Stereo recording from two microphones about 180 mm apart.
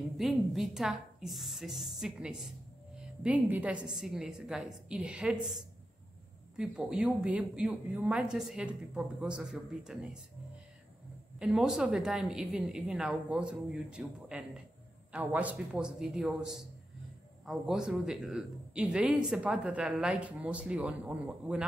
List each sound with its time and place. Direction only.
0.2 s a woman's voice: centre (ahead or behind)
11.3 s speech: 5° right (ahead or behind)